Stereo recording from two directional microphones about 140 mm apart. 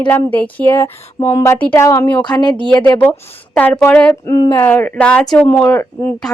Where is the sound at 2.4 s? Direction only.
35° left (ahead or behind).